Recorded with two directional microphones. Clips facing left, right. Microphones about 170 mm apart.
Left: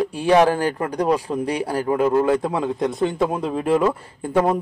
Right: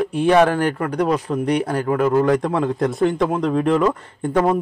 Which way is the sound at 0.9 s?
10° left (ahead or behind).